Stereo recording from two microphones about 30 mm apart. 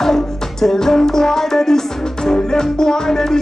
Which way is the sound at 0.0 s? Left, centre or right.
Centre.